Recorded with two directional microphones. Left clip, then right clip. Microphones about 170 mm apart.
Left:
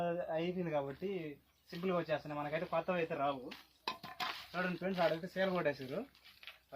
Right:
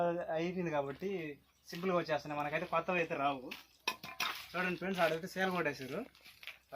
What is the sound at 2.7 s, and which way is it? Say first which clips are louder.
Dishes: right 1 dB; 45° left (ahead or behind).